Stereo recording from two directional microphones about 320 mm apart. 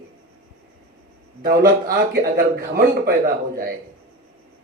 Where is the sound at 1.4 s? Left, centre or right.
Right.